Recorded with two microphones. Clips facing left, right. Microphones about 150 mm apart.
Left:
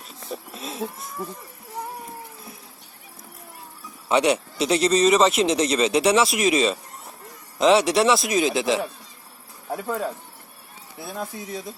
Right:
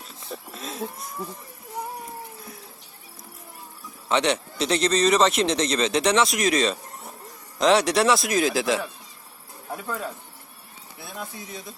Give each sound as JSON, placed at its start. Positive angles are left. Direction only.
{"t": 0.3, "sound": "livestock", "side_deg": 0}
{"t": 4.1, "sound": "speech", "side_deg": 10}
{"t": 9.7, "sound": "speech", "side_deg": 25}
{"t": 11.1, "sound": "speech", "side_deg": 35}